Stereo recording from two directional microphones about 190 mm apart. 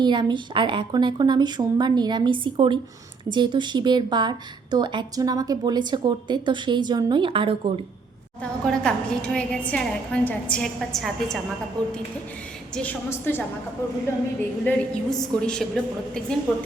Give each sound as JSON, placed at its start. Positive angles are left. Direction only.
{"t": 0.0, "sound": "a woman's voice", "side_deg": -25}
{"t": 8.4, "sound": "a woman's voice", "side_deg": 5}
{"t": 14.6, "sound": "a woman's voice", "side_deg": 10}